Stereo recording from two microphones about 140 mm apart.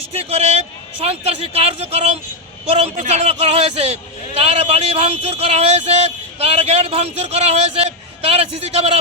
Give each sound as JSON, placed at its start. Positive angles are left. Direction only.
{"t": 0.1, "sound": "a man's voice", "side_deg": -45}
{"t": 3.1, "sound": "a sound", "side_deg": -50}
{"t": 6.4, "sound": "a man's voice", "side_deg": -45}